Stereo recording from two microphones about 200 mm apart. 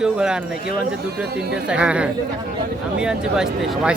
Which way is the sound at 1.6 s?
5° right (ahead or behind).